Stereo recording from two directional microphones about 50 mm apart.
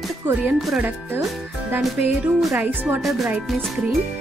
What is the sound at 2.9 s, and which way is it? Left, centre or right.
Speech, centre.